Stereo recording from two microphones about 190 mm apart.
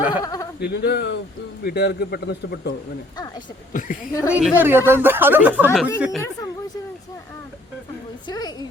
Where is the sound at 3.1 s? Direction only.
20° left (ahead or behind).